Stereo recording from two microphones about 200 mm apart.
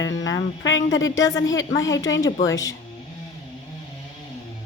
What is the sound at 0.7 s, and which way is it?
Speech, 70° left (ahead or behind).